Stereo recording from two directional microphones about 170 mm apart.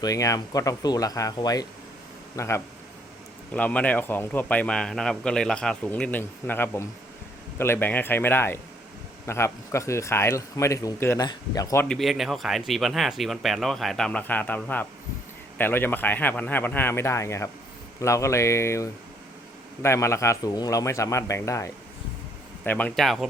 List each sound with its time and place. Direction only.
0.0 s a man's voice: 20° left (ahead or behind)
11.9 s a man's voice: centre (ahead or behind)